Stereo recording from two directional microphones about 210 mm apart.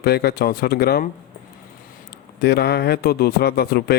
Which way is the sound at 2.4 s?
50° left (ahead or behind).